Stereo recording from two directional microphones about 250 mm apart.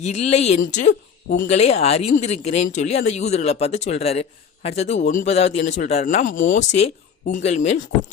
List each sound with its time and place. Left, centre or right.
0.0 s speech: left